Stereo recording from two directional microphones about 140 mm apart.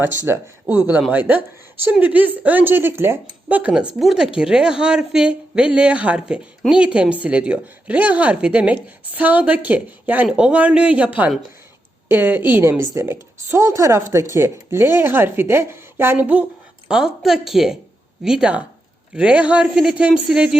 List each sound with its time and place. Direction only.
0.0 s a woman's voice: 15° right (ahead or behind)